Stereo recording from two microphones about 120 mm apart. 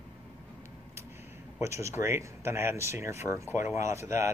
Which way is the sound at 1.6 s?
25° right (ahead or behind).